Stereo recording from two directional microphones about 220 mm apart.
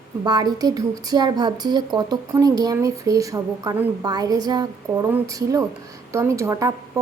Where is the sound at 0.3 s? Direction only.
20° right (ahead or behind).